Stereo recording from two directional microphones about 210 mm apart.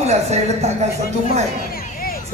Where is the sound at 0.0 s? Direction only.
30° right (ahead or behind).